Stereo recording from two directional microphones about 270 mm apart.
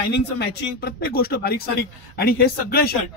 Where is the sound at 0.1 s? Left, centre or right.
Left.